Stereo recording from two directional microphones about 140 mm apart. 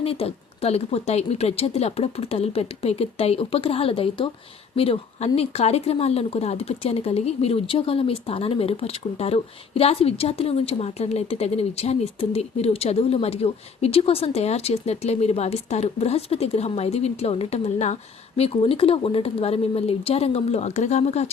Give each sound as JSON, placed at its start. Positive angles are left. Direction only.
{"t": 0.0, "sound": "speech", "side_deg": 45}